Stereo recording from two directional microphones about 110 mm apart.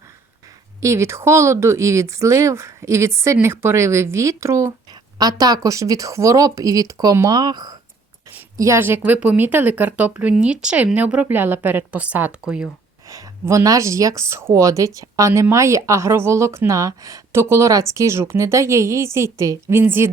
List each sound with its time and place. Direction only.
0.8 s speech: 25° right (ahead or behind)
8.5 s speech: 25° right (ahead or behind); by 12.6 s 10° right (ahead or behind)
13.1 s speech: 30° right (ahead or behind)